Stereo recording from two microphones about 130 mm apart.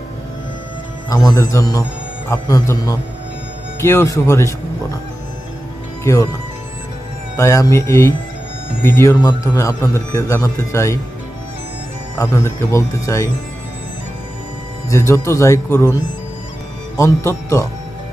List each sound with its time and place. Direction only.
1.1 s a man's voice: 25° left (ahead or behind)
6.1 s a man's voice: 20° left (ahead or behind)
7.3 s a man's voice: 25° left (ahead or behind)
12.2 s a man's voice: 25° left (ahead or behind)
14.9 s a man's voice: 20° left (ahead or behind)